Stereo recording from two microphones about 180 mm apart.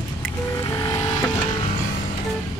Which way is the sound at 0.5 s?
15° left (ahead or behind).